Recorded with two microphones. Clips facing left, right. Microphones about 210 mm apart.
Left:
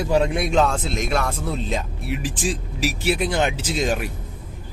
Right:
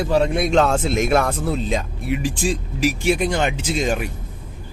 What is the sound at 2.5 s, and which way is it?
Speech, 50° right (ahead or behind).